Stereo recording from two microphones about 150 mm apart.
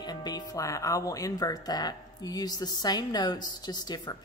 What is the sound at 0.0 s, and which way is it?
Speech, 25° left (ahead or behind).